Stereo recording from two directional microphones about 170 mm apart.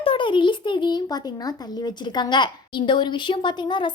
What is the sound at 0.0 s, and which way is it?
A child's voice, 30° left (ahead or behind).